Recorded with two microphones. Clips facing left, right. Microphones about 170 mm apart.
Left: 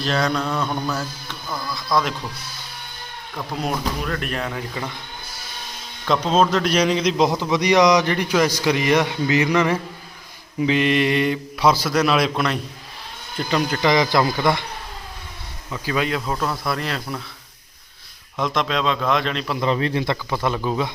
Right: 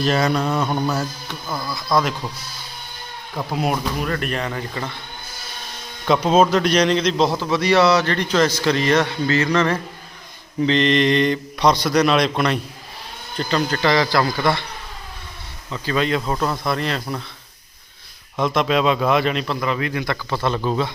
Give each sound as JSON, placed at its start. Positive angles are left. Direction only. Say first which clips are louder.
{"t": 0.0, "sound": "a sound", "louder": "right 3 dB", "side_deg": -5}
{"t": 1.7, "sound": "speech", "louder": "right 2 dB", "side_deg": 0}
{"t": 3.6, "sound": "speech", "louder": "right 2 dB", "side_deg": -5}
{"t": 6.1, "sound": "a man's voice", "louder": "right 3 dB", "side_deg": -5}
{"t": 13.5, "sound": "a man's voice", "louder": "even", "side_deg": 10}
{"t": 15.7, "sound": "speech", "louder": "right 2 dB", "side_deg": 10}
{"t": 18.3, "sound": "speech", "louder": "right 4 dB", "side_deg": -5}
{"t": 19.5, "sound": "speech", "louder": "left 2 dB", "side_deg": 30}
{"t": 20.3, "sound": "a man's voice", "louder": "right 3 dB", "side_deg": 10}